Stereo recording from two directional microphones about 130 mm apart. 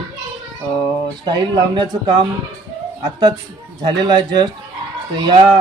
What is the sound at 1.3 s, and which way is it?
Speech, 35° right (ahead or behind).